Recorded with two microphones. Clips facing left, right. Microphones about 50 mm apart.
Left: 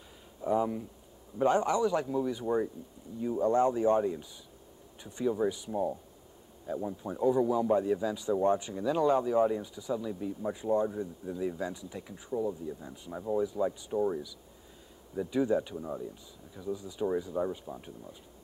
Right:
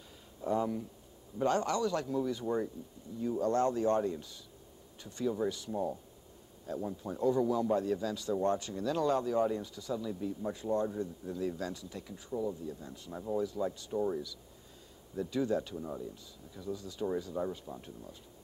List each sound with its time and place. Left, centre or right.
0.4 s a man's voice: centre